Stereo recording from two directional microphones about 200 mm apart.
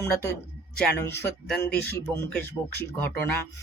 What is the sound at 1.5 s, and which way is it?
Speech, 5° left (ahead or behind).